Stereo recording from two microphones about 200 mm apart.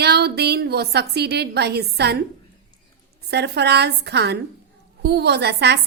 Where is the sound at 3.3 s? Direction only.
55° right (ahead or behind).